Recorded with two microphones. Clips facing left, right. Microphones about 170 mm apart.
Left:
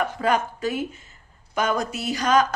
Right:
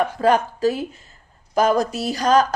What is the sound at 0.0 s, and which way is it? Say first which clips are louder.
A woman's voice: right 5 dB; 35° right (ahead or behind).